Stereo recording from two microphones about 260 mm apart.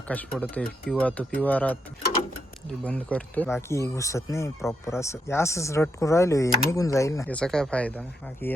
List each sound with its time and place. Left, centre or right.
0.1 s speech: centre